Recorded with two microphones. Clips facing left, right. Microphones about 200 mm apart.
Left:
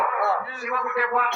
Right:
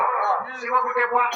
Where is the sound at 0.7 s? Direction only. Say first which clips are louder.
Right 2 dB; 35° left (ahead or behind).